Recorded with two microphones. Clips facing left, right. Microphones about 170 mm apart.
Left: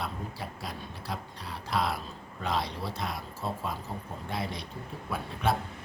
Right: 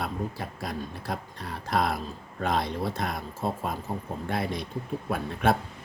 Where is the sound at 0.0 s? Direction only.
50° right (ahead or behind).